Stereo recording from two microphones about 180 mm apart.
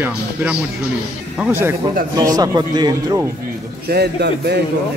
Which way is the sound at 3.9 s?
65° right (ahead or behind).